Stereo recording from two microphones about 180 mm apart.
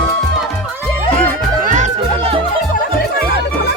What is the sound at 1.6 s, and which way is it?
Music, 45° right (ahead or behind).